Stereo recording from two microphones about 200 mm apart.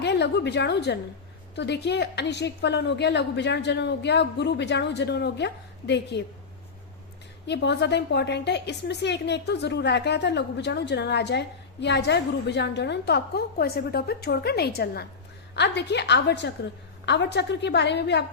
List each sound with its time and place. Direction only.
0.0 s a woman's voice: 60° left (ahead or behind)
7.4 s a woman's voice: 60° left (ahead or behind)